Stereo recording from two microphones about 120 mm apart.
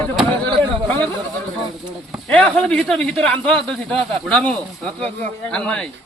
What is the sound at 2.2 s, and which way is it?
Speech, 5° left (ahead or behind).